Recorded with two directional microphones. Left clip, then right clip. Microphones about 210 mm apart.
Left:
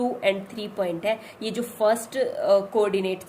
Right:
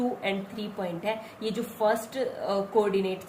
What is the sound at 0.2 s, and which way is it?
A woman's voice, 50° left (ahead or behind).